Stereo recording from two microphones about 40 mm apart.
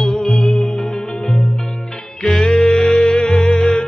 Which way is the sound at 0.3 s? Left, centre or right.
Centre.